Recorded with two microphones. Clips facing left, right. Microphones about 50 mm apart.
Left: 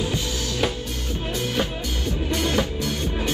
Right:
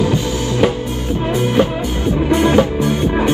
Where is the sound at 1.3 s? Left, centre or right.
Right.